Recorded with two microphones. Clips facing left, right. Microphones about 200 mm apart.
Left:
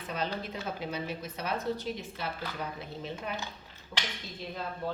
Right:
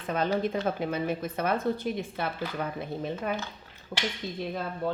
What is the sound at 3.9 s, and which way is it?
Speech, 50° right (ahead or behind).